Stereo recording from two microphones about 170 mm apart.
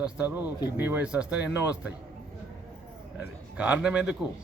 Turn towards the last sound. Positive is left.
turn(degrees=-5)  # may be behind; listen again after turning